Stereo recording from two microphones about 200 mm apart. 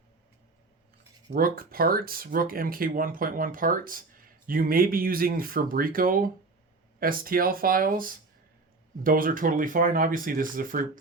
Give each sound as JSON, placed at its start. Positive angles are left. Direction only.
{"t": 1.3, "sound": "speech", "side_deg": -45}